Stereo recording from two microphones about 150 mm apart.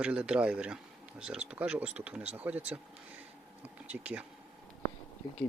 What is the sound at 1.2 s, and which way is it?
Speech, 5° right (ahead or behind).